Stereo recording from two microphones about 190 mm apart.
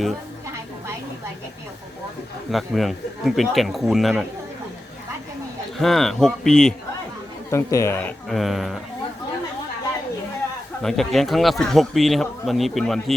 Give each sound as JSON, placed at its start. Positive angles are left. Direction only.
{"t": 2.5, "sound": "speech", "side_deg": 0}
{"t": 5.7, "sound": "speech", "side_deg": 0}
{"t": 7.5, "sound": "speech", "side_deg": 15}
{"t": 8.3, "sound": "speech", "side_deg": 0}
{"t": 10.8, "sound": "speech", "side_deg": 0}